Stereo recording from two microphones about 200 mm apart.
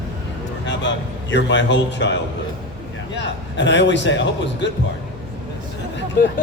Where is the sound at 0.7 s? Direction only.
60° left (ahead or behind).